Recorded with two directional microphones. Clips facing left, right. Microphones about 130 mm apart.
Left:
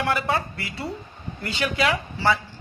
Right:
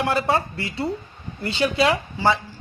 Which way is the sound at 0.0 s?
30° right (ahead or behind).